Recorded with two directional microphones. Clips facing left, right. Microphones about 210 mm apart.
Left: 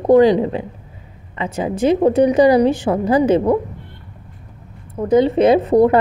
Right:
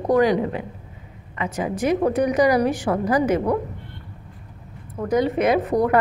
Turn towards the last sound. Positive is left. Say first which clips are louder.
# left 7 dB
turn(degrees=30)  # may be behind; listen again after turning